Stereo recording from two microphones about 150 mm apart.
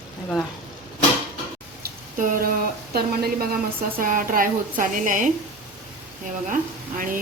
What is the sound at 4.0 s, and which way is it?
A woman's voice, 70° right (ahead or behind).